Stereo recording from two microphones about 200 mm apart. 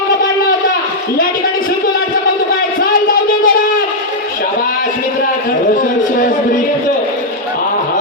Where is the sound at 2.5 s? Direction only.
45° left (ahead or behind).